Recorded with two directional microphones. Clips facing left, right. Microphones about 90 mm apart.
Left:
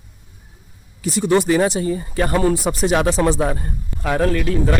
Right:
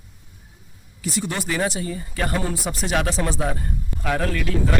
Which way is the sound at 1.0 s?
25° left (ahead or behind).